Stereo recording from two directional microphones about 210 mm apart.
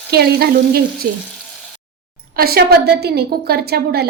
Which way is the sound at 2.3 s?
45° right (ahead or behind).